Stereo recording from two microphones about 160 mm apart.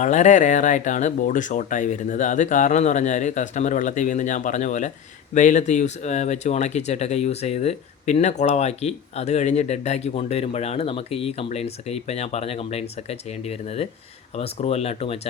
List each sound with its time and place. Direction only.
0.0 s speech: 50° left (ahead or behind)